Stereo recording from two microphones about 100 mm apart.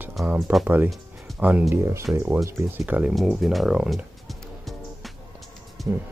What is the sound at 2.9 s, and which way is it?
Speech, 15° right (ahead or behind).